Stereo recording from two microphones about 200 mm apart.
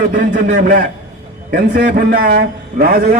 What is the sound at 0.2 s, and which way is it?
A man's voice, 40° right (ahead or behind).